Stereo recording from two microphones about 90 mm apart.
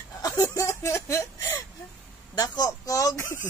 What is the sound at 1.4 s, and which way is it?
Whimper, 45° left (ahead or behind).